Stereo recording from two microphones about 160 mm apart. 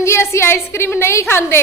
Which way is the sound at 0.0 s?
15° left (ahead or behind).